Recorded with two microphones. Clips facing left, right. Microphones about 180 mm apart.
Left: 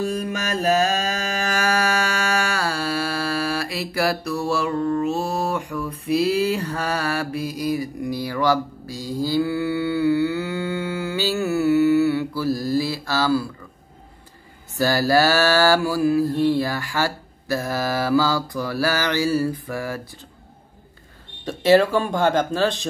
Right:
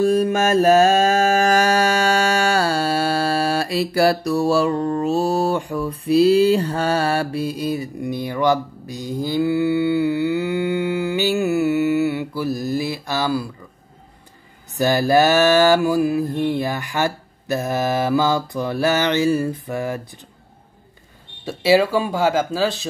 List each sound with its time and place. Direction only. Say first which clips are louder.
0.3 s mantra: right 7 dB; 50° right (ahead or behind)
1.6 s mantra: right 4 dB; 30° right (ahead or behind)
14.7 s mantra: right 2 dB; 20° right (ahead or behind)
21.5 s speech: even; 10° right (ahead or behind)